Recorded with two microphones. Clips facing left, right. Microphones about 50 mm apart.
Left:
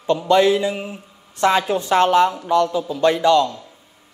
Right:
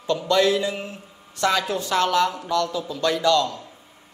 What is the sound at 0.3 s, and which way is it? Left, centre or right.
Speech, left.